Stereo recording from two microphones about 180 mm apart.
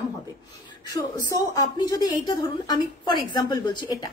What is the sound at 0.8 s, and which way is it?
A woman's voice, 20° left (ahead or behind).